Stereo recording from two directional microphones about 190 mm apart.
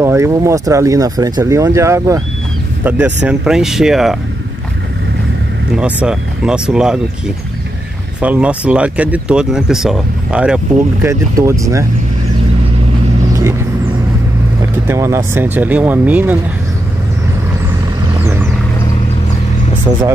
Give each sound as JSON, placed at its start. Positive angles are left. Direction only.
{"t": 0.0, "sound": "speech", "side_deg": -15}
{"t": 5.8, "sound": "speech", "side_deg": -5}
{"t": 13.3, "sound": "vehicle", "side_deg": -15}
{"t": 14.9, "sound": "speech", "side_deg": -15}
{"t": 18.2, "sound": "vehicle", "side_deg": -10}